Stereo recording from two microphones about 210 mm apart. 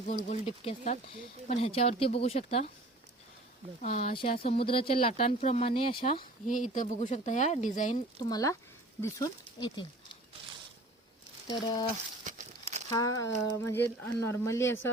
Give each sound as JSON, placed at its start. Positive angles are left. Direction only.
{"t": 0.1, "sound": "speech", "side_deg": 40}
{"t": 0.4, "sound": "speech", "side_deg": 30}
{"t": 3.8, "sound": "speech", "side_deg": 45}
{"t": 4.2, "sound": "speech", "side_deg": 25}
{"t": 6.5, "sound": "speech", "side_deg": 40}
{"t": 8.2, "sound": "speech", "side_deg": 15}
{"t": 11.4, "sound": "speech", "side_deg": 20}
{"t": 12.2, "sound": "a sound", "side_deg": -35}
{"t": 12.9, "sound": "speech", "side_deg": 15}